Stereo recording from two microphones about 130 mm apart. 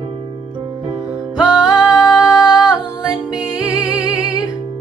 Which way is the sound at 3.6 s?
30° left (ahead or behind).